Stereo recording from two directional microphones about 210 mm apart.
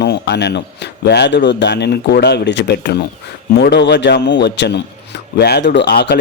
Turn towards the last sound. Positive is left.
turn(degrees=55)  # may be behind; listen again after turning